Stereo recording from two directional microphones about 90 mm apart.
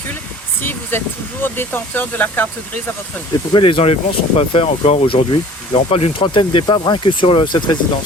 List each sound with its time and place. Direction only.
0.6 s speech: 25° left (ahead or behind)
3.5 s speech: 75° left (ahead or behind); by 7.8 s 60° left (ahead or behind)